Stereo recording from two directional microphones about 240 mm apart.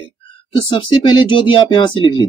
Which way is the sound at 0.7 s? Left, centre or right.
Left.